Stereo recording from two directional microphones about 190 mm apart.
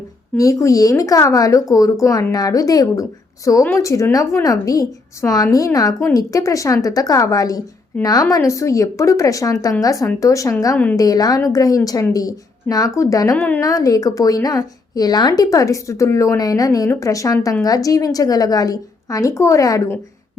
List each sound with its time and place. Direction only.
0.3 s a woman's voice: 15° left (ahead or behind)